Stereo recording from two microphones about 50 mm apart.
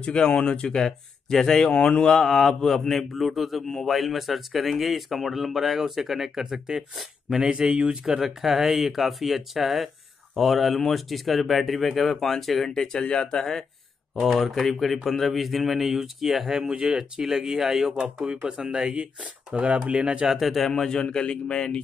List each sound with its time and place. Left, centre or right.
0.0 s speech: centre
1.7 s speech: left
2.0 s a man's voice: centre
7.5 s speech: right
8.2 s a man's voice: centre
20.3 s a man's voice: centre
20.7 s speech: centre